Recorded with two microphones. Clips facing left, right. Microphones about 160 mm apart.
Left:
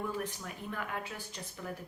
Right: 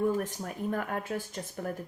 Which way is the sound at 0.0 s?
45° right (ahead or behind).